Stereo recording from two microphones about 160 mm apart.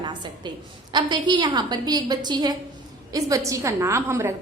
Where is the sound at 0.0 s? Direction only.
25° right (ahead or behind).